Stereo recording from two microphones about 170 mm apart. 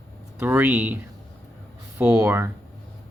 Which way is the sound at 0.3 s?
10° right (ahead or behind).